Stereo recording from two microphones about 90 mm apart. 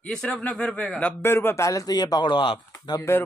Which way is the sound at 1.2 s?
25° left (ahead or behind).